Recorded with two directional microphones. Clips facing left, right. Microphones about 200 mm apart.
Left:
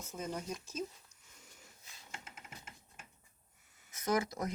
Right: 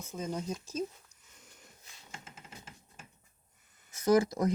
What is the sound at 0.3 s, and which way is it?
Speech, 25° right (ahead or behind).